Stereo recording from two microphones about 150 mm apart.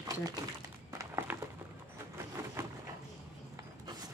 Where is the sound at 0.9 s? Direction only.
20° right (ahead or behind).